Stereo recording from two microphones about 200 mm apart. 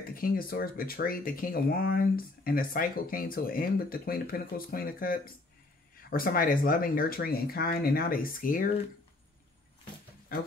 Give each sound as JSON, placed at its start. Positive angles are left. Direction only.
{"t": 0.0, "sound": "speech", "side_deg": 45}
{"t": 10.3, "sound": "speech", "side_deg": 45}